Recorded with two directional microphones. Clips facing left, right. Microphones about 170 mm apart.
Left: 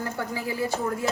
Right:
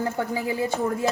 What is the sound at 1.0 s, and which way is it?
Speech, 25° right (ahead or behind).